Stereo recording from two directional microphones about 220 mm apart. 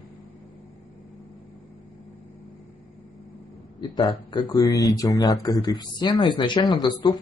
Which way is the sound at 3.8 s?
20° left (ahead or behind).